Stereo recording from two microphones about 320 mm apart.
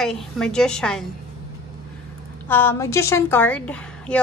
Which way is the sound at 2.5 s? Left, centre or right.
Centre.